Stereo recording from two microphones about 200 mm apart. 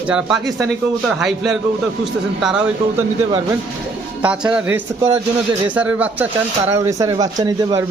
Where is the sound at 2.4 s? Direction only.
5° right (ahead or behind).